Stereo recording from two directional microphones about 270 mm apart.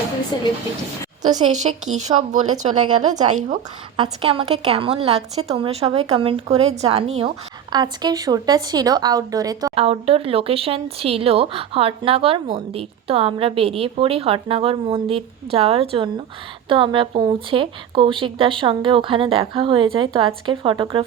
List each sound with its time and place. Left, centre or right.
0.3 s speech: centre
1.2 s speech: right